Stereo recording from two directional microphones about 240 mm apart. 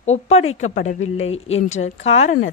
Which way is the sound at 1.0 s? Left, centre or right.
Left.